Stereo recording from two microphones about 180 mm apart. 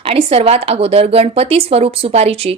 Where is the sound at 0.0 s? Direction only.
30° right (ahead or behind).